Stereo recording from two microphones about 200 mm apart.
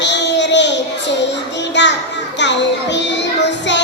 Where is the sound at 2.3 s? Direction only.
60° left (ahead or behind).